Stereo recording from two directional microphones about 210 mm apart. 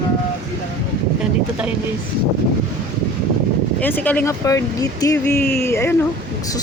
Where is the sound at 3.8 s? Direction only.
10° left (ahead or behind).